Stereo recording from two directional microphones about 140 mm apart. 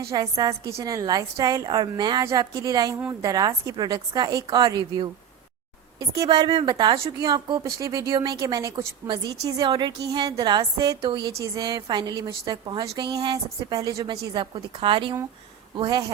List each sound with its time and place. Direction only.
0.1 s a woman's voice: 25° right (ahead or behind)